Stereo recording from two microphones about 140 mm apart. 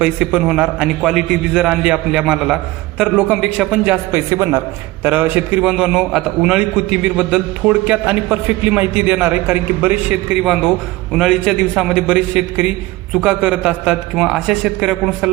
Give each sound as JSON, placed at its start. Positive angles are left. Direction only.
{"t": 0.0, "sound": "a man's voice", "side_deg": -10}
{"t": 4.3, "sound": "a man's voice", "side_deg": -30}
{"t": 5.0, "sound": "a man's voice", "side_deg": -15}